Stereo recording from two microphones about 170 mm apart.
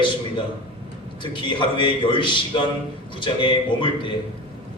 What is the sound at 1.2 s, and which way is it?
A man's voice, 30° left (ahead or behind).